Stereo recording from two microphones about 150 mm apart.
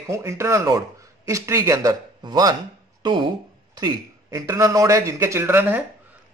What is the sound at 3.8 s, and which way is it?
A man's voice, 20° right (ahead or behind).